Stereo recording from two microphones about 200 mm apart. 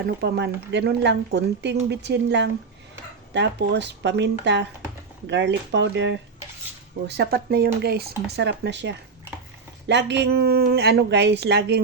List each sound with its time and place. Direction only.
0.2 s speech: 55° right (ahead or behind)